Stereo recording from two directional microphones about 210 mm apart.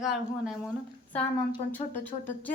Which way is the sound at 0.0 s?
Centre (ahead or behind).